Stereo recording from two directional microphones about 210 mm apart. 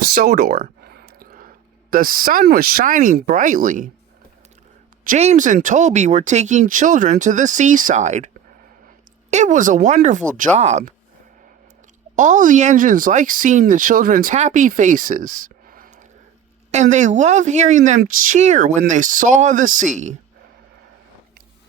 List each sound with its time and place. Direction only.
0.1 s speech: 45° right (ahead or behind)
5.0 s speech: 30° right (ahead or behind)
9.3 s speech: 35° right (ahead or behind)
12.1 s speech: 35° right (ahead or behind)